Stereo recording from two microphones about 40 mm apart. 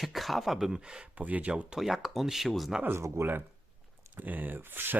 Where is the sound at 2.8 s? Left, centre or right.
Right.